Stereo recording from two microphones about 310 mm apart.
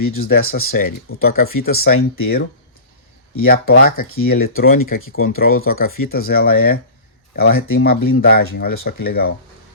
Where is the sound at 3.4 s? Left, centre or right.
Left.